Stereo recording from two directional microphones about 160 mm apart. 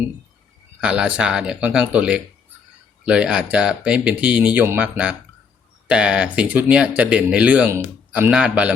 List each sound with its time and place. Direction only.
0.8 s speech: 5° right (ahead or behind)